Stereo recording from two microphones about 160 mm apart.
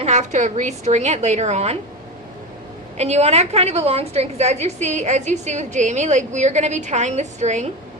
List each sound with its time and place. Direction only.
0.0 s a woman's voice: 45° right (ahead or behind)
3.0 s a woman's voice: 45° right (ahead or behind)